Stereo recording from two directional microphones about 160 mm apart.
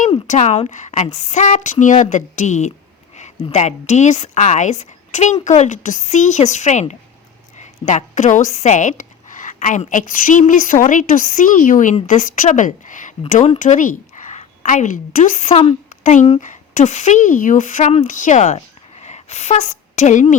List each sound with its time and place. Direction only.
0.3 s a woman's voice: 45° left (ahead or behind)